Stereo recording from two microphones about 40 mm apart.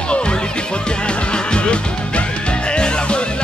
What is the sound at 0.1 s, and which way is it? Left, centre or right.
Music, left.